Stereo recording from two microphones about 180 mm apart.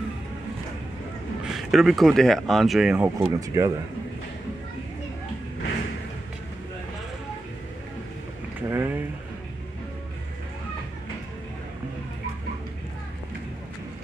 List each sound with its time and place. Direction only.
1.4 s speech: centre (ahead or behind)
3.2 s speech: 20° right (ahead or behind)
8.6 s a sound: 10° right (ahead or behind)